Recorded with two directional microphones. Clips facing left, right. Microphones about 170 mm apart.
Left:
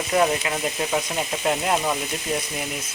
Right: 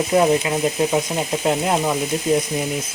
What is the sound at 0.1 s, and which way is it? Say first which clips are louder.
Frying: right 3 dB; 20° right (ahead or behind).